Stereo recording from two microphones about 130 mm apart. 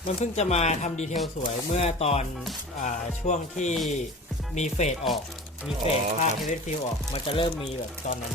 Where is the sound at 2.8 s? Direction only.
65° left (ahead or behind).